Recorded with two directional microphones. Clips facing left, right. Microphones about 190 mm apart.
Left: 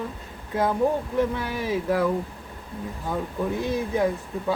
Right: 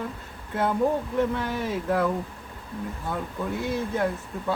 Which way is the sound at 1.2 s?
10° left (ahead or behind).